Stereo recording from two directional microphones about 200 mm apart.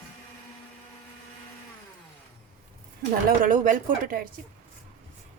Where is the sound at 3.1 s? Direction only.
45° right (ahead or behind).